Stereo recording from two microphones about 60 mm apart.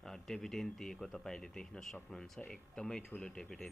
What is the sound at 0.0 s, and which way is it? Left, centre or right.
Speech, centre.